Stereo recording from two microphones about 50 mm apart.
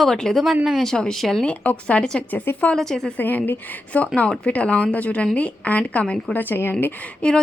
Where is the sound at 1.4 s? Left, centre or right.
Left.